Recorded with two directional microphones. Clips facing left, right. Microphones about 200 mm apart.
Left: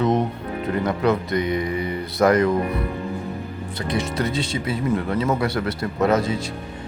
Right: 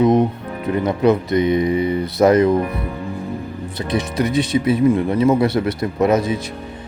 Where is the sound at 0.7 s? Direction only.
20° right (ahead or behind).